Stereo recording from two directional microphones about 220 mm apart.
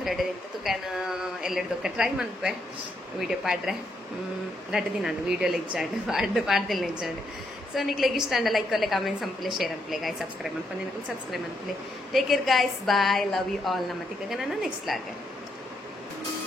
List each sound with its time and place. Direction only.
0.7 s a woman's voice: centre (ahead or behind)
12.1 s a woman's voice: centre (ahead or behind)